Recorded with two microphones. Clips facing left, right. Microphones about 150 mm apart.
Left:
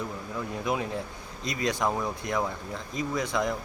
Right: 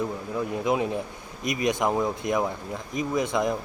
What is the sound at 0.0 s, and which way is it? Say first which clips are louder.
Speech: right 5 dB; 20° right (ahead or behind).